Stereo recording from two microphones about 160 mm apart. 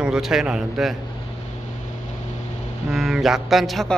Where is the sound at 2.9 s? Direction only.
Centre (ahead or behind).